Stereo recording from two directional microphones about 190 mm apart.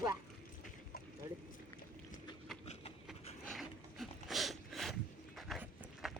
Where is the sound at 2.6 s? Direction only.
35° left (ahead or behind).